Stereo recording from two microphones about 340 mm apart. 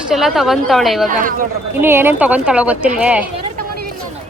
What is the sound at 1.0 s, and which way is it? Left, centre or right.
Speech, right.